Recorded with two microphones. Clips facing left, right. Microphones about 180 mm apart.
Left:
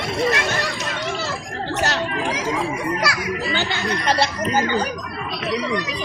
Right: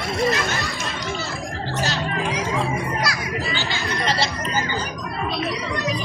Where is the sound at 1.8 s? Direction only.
80° left.